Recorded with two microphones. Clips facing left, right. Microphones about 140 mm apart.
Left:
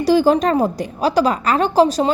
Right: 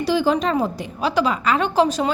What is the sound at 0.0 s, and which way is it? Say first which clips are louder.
A woman's voice: left 5 dB; 40° left (ahead or behind).